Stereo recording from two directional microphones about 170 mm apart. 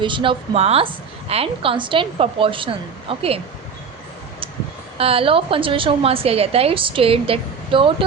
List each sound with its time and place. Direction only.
0.0 s a woman's voice: 30° right (ahead or behind)
4.9 s a woman's voice: 35° right (ahead or behind)